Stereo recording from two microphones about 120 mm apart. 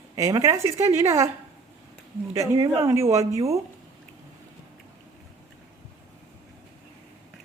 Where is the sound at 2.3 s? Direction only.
25° right (ahead or behind).